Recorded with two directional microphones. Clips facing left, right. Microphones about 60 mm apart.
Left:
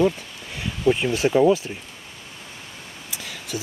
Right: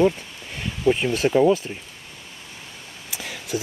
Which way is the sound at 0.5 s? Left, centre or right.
Centre.